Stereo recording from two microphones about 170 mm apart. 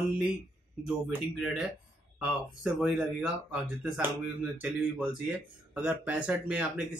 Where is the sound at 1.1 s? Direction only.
5° right (ahead or behind).